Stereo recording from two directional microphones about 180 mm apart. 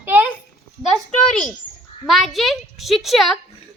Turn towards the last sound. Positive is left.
turn(degrees=0)  # may be behind; listen again after turning